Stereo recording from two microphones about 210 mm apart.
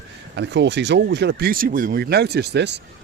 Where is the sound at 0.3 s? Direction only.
55° right (ahead or behind).